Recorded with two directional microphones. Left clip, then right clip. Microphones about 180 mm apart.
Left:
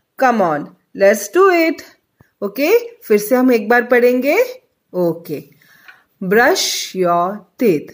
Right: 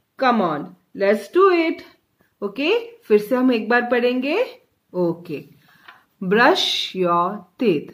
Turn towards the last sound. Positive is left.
turn(degrees=35)  # may be behind; listen again after turning